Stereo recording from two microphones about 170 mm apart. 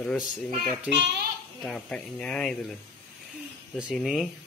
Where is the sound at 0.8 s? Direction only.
90° right.